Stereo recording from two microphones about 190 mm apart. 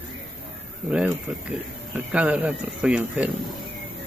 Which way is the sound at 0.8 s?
5° right (ahead or behind).